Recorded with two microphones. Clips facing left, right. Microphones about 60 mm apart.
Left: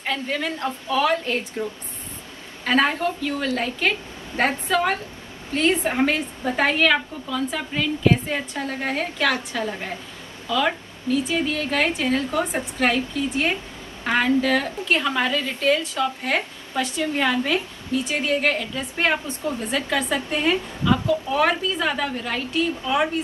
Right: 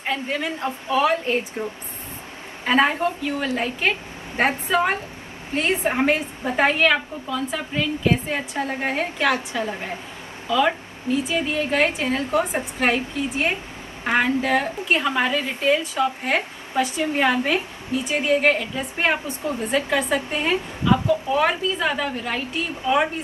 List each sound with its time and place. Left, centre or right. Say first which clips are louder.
0.0 s a woman's voice: even; centre